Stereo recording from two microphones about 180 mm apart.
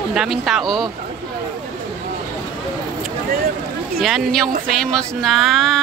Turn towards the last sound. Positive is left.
turn(degrees=0)  # may be behind; listen again after turning